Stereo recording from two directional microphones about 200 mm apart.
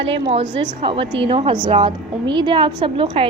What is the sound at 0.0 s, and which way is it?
A woman's voice, 30° right (ahead or behind).